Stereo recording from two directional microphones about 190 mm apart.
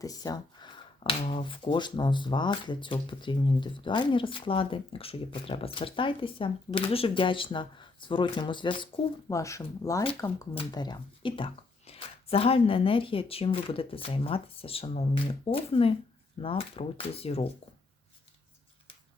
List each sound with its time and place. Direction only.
0.0 s speech: 20° left (ahead or behind)